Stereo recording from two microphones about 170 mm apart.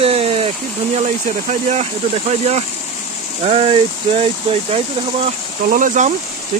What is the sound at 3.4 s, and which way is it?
Speech, 35° right (ahead or behind).